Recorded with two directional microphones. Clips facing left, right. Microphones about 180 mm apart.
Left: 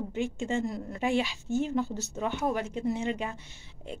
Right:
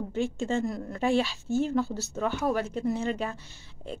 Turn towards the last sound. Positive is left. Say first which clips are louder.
# right 2 dB
turn(degrees=20)  # may be behind; listen again after turning